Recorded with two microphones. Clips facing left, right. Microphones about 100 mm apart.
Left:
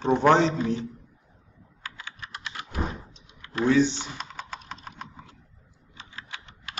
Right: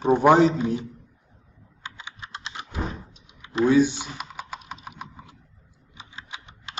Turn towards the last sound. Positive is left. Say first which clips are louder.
# right 1 dB
turn(degrees=-20)  # may be behind; listen again after turning